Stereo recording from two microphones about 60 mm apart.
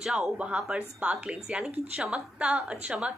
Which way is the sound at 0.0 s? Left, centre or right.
Centre.